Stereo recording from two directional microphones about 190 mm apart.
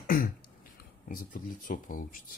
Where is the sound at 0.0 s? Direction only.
50° left (ahead or behind).